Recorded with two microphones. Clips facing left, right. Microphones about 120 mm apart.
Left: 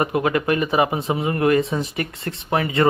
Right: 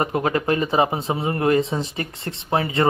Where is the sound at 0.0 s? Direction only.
35° right (ahead or behind).